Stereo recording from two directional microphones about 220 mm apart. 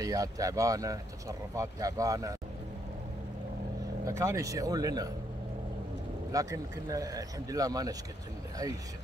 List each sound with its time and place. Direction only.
0.0 s speech: 15° right (ahead or behind)
4.2 s speech: 15° right (ahead or behind)
6.3 s speech: 15° right (ahead or behind)